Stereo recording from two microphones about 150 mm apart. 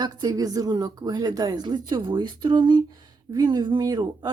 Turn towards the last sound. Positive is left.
turn(degrees=-30)  # may be behind; listen again after turning